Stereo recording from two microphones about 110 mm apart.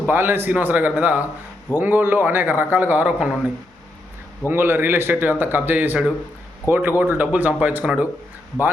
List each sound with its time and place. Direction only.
0.1 s a man's voice: 20° right (ahead or behind)